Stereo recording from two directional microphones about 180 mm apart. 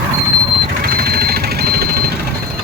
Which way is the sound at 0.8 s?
55° right (ahead or behind).